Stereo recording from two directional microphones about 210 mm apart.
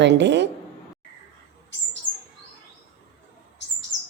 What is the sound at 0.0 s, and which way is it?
Speech, 55° right (ahead or behind).